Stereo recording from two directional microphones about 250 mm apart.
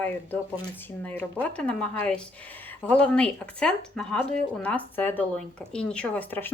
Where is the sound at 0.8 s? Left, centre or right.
Centre.